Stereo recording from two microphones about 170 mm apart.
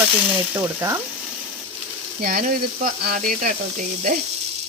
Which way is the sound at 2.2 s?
60° right (ahead or behind).